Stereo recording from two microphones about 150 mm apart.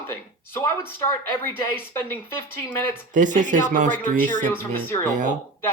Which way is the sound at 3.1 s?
60° right (ahead or behind).